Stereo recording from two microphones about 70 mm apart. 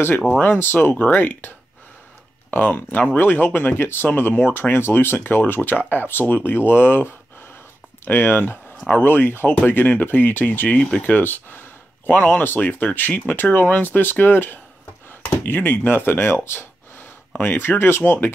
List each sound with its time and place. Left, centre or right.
0.4 s speech: left
2.5 s speech: left